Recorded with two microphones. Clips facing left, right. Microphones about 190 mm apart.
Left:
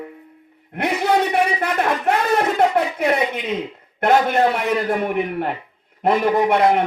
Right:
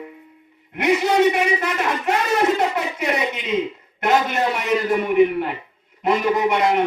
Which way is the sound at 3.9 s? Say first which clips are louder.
Left 3 dB; 55° left (ahead or behind).